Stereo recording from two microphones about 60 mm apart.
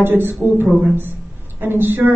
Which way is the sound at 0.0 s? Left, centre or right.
Right.